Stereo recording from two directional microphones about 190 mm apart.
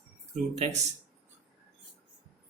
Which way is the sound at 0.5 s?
35° right (ahead or behind).